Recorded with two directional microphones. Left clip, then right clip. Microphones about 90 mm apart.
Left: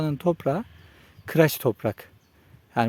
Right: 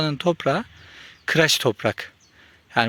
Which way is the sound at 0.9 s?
25° left (ahead or behind).